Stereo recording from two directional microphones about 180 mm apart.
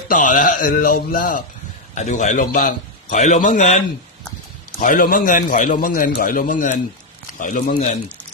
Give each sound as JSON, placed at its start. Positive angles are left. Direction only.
{"t": 0.1, "sound": "a man's voice", "side_deg": 45}
{"t": 2.0, "sound": "a man's voice", "side_deg": 40}